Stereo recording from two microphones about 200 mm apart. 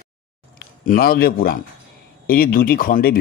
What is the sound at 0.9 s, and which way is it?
Speech, 50° left (ahead or behind).